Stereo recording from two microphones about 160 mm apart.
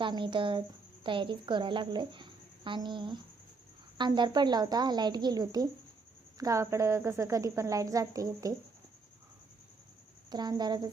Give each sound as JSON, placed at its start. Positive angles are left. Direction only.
{"t": 0.0, "sound": "a woman's voice", "side_deg": -30}
{"t": 10.2, "sound": "a woman's voice", "side_deg": -25}